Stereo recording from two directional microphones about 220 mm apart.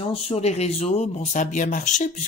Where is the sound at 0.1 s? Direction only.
25° left (ahead or behind).